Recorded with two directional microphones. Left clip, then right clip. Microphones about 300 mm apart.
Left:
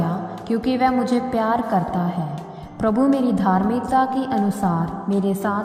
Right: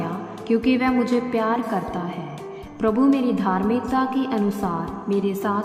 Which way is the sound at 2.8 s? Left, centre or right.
Left.